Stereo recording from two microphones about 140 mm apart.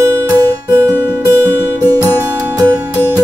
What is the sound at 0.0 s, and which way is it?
Guitar, 15° right (ahead or behind).